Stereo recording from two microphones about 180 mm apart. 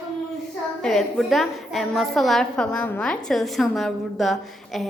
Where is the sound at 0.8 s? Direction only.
5° left (ahead or behind).